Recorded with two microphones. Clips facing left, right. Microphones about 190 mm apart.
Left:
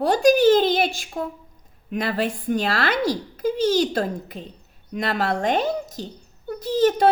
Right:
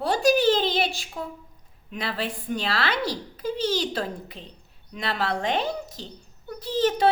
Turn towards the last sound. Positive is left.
turn(degrees=45)  # may be behind; listen again after turning